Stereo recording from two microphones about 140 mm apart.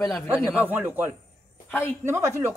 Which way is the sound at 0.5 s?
10° right (ahead or behind).